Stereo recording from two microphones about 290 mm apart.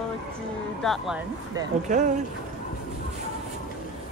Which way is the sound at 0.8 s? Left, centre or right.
Centre.